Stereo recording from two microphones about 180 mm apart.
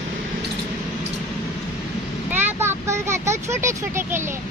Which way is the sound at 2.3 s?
10° right (ahead or behind).